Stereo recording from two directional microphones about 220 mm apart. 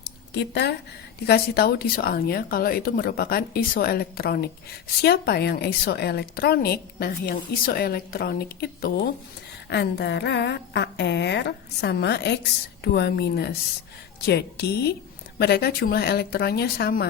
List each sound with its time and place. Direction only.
0.3 s a woman's voice: 50° left (ahead or behind)